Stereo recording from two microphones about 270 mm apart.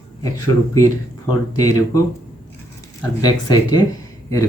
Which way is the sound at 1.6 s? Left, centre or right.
Centre.